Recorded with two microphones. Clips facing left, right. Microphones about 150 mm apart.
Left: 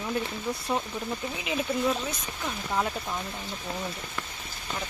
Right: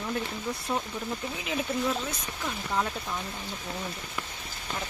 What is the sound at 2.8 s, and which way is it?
Speech, 10° left (ahead or behind).